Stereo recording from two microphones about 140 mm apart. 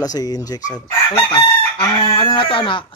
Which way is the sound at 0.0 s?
25° left (ahead or behind).